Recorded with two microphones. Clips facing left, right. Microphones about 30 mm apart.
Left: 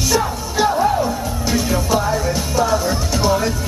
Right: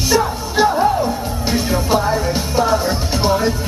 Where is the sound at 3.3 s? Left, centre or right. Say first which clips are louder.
Right 2 dB; right.